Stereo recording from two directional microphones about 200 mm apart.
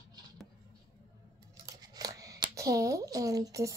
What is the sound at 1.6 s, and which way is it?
Scissors, 20° right (ahead or behind).